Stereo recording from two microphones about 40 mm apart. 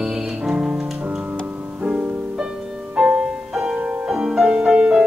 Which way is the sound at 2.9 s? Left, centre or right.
Centre.